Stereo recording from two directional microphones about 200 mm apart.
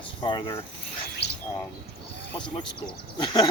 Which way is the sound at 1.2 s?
55° left (ahead or behind).